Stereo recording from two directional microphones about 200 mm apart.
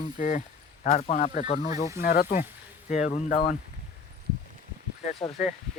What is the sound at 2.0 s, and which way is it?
Speech, 50° left (ahead or behind).